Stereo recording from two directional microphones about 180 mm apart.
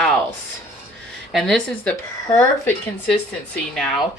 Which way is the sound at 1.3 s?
Centre (ahead or behind).